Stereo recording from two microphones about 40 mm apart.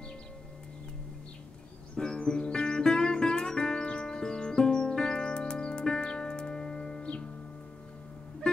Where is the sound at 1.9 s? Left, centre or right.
Centre.